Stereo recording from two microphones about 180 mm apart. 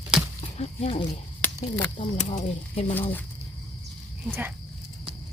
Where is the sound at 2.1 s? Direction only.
40° left (ahead or behind).